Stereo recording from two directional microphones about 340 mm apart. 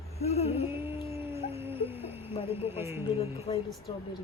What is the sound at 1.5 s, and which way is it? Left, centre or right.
Music, centre.